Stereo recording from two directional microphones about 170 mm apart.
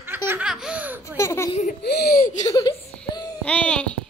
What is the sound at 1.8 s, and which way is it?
Speech, 70° left (ahead or behind).